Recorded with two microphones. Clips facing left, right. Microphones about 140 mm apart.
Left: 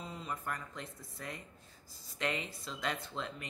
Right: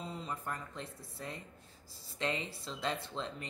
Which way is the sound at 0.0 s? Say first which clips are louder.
Right 1 dB; 30° right (ahead or behind).